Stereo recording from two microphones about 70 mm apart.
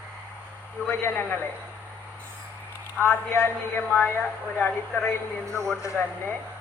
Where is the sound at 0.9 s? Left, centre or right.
Left.